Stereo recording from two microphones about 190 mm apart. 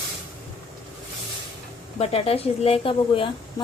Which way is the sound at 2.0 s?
30° left (ahead or behind).